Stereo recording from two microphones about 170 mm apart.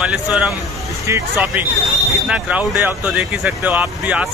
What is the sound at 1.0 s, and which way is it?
Speech, 15° right (ahead or behind).